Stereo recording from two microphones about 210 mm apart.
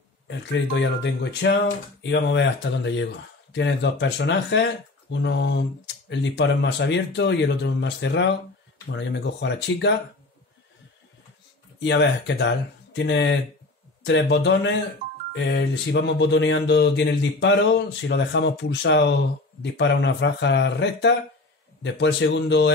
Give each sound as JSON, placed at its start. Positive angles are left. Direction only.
{"t": 0.3, "sound": "speech", "side_deg": 60}
{"t": 11.8, "sound": "speech", "side_deg": 60}